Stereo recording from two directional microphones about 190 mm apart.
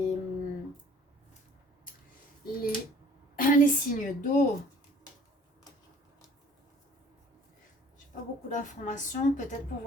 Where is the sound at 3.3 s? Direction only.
45° left (ahead or behind).